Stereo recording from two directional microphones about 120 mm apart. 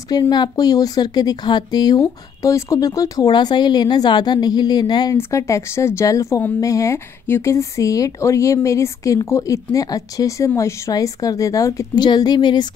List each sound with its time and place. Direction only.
0.3 s speech: 35° left (ahead or behind)
5.1 s speech: 25° left (ahead or behind)